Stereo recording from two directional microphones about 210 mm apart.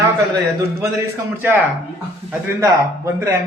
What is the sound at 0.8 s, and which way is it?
A man's voice, 10° right (ahead or behind).